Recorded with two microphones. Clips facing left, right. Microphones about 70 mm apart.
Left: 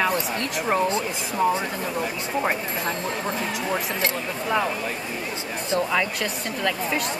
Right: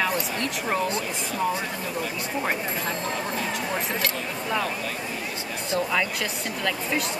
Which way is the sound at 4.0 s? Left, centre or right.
Left.